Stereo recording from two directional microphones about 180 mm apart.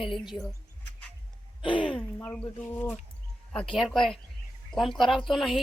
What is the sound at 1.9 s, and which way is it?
A woman's voice, 10° left (ahead or behind).